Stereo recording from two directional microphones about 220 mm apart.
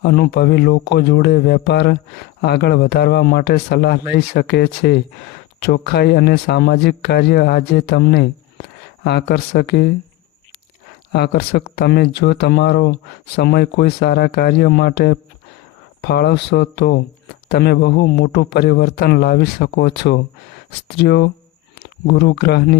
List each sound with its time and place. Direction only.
0.0 s speech: 45° left (ahead or behind)
11.1 s speech: 50° left (ahead or behind)